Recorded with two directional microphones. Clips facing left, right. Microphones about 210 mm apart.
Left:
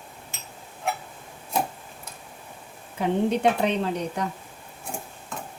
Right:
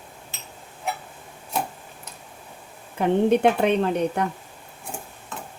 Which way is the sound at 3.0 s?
60° right (ahead or behind).